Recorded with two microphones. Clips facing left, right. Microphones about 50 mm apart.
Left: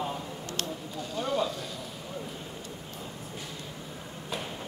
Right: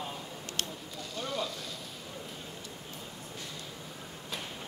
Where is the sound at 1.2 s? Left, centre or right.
Left.